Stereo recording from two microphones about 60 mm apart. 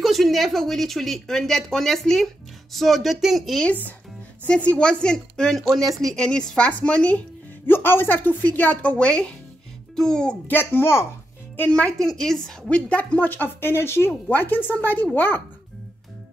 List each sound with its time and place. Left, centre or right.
0.0 s speech: centre
4.5 s a woman's voice: centre
6.1 s a woman's voice: centre
7.6 s a woman's voice: left; by 10.3 s centre
10.5 s speech: left
11.7 s a woman's voice: centre
12.6 s speech: left
14.3 s speech: left